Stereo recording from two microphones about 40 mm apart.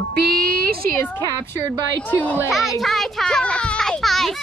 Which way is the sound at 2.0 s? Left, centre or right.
Left.